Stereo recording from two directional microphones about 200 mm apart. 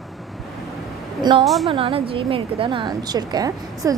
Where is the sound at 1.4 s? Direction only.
Centre (ahead or behind).